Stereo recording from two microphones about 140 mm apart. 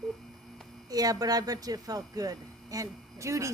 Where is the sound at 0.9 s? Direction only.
25° right (ahead or behind).